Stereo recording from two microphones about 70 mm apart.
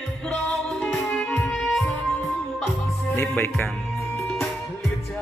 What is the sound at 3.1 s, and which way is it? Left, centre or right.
Speech, left.